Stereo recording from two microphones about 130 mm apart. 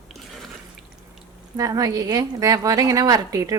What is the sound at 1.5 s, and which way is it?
A woman's voice, 25° right (ahead or behind).